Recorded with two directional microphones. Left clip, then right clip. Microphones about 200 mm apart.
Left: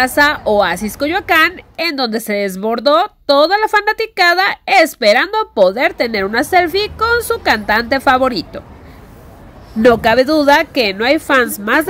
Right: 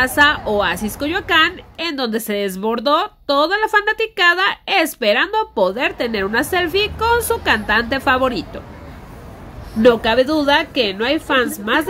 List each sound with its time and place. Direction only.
0.0 s a woman's voice: 25° left (ahead or behind)
9.8 s a woman's voice: 30° left (ahead or behind)